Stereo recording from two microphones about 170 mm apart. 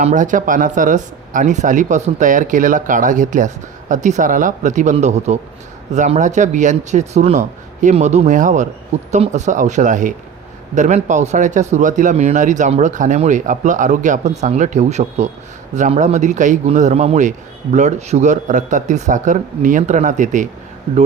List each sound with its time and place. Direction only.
0.0 s speech: 45° right (ahead or behind)